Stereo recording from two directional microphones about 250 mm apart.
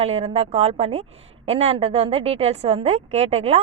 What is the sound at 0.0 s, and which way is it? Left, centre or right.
A woman's voice, right.